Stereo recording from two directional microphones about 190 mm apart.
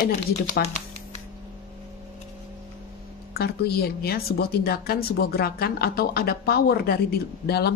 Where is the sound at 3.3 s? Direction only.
55° left (ahead or behind).